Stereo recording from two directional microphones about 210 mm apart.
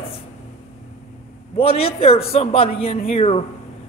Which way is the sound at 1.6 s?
25° left (ahead or behind).